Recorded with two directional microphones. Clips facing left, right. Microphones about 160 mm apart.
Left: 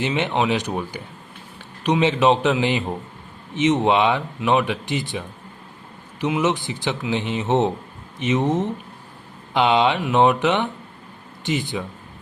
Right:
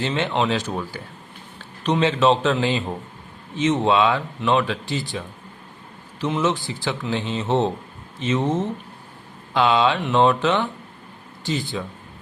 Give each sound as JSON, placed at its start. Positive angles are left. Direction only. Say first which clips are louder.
{"t": 0.0, "sound": "a man's voice", "louder": "left 1 dB", "side_deg": 15}